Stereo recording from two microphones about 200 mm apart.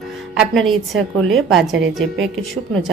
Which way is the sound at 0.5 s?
Centre (ahead or behind).